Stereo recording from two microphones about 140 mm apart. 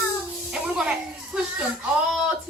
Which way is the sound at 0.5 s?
5° right (ahead or behind).